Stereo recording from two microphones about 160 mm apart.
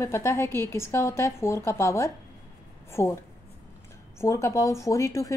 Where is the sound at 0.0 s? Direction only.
15° left (ahead or behind).